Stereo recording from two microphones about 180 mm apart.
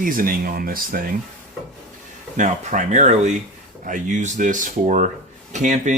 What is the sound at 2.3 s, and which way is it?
Speech, 45° right (ahead or behind).